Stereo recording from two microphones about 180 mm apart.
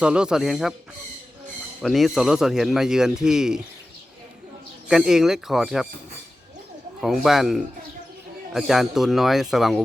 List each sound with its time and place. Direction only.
0.0 s speech: 5° right (ahead or behind)
1.8 s speech: centre (ahead or behind)
4.9 s speech: centre (ahead or behind)
7.0 s speech: centre (ahead or behind)